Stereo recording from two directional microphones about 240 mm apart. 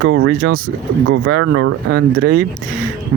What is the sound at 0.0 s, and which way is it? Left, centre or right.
Speech, right.